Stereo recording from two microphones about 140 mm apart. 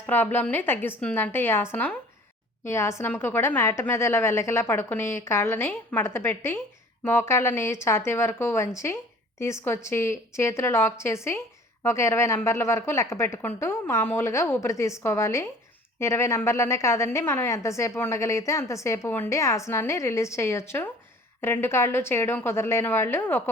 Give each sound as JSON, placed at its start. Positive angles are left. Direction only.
{"t": 0.0, "sound": "a woman's voice", "side_deg": 15}